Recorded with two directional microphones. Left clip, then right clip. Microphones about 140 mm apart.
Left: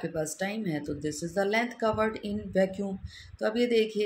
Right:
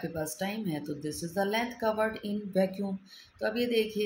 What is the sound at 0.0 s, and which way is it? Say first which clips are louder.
Speech: left 3 dB; 35° left (ahead or behind).